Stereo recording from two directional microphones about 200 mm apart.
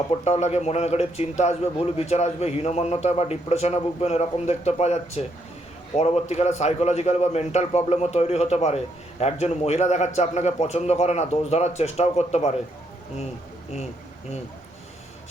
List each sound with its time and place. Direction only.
0.1 s a man's voice: 35° left (ahead or behind)